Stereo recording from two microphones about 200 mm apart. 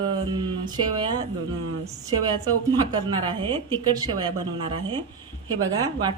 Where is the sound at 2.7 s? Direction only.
20° right (ahead or behind).